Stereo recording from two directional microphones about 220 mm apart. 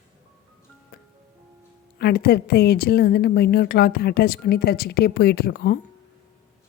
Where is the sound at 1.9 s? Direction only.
45° left (ahead or behind).